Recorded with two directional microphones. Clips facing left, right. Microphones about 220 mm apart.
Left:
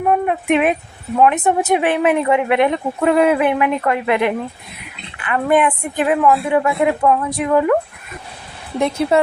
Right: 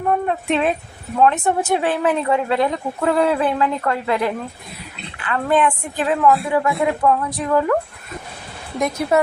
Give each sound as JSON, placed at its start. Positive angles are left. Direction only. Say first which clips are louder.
{"t": 0.1, "sound": "a woman's voice", "louder": "left 3 dB", "side_deg": 15}
{"t": 8.8, "sound": "speech", "louder": "left 2 dB", "side_deg": 30}